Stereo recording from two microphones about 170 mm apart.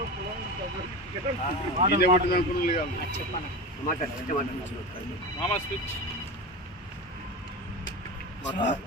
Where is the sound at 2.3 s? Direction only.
60° left (ahead or behind).